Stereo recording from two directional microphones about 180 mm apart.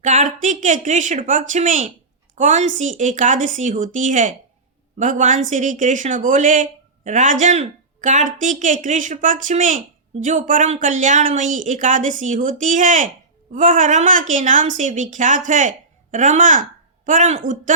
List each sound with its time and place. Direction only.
0.0 s speech: 40° right (ahead or behind)